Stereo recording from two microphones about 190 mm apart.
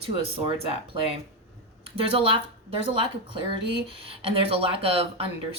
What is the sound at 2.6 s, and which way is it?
Speech, 25° right (ahead or behind).